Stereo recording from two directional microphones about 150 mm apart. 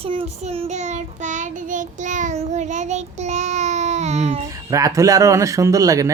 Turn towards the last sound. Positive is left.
turn(degrees=-20)  # may be behind; listen again after turning